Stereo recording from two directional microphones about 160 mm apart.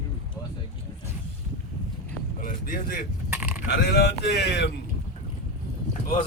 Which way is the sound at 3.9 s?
90° left.